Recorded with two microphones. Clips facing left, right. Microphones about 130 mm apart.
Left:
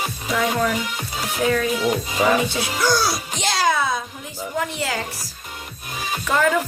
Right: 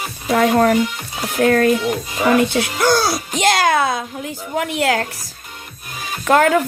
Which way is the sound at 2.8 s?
55° right (ahead or behind).